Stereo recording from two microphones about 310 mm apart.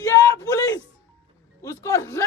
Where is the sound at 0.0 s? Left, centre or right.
Centre.